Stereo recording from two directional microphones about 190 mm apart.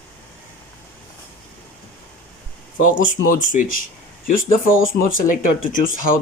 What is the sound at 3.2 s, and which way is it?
Speech, 45° left (ahead or behind).